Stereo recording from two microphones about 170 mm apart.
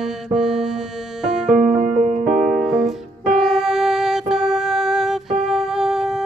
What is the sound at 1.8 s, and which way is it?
Music, 45° right (ahead or behind).